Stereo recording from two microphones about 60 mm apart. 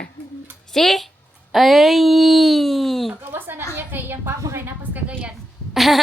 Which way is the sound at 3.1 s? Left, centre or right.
Right.